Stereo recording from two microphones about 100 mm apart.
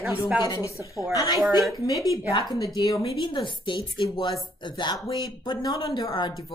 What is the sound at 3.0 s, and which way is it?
Speech, 55° left (ahead or behind).